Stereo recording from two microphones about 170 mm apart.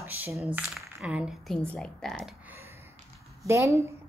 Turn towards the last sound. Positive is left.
turn(degrees=-15)  # may be behind; listen again after turning